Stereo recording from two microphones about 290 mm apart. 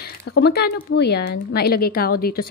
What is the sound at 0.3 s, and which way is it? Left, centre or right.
A woman's voice, left.